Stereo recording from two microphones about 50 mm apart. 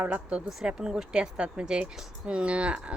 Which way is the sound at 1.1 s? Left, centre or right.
Centre.